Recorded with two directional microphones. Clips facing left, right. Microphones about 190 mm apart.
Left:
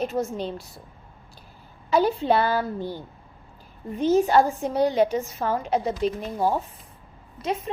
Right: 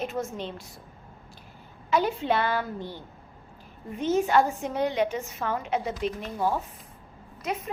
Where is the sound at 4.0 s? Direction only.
35° left (ahead or behind).